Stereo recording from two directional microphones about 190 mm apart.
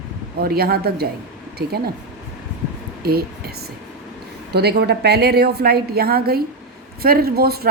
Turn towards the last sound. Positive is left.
turn(degrees=-55)  # may be behind; listen again after turning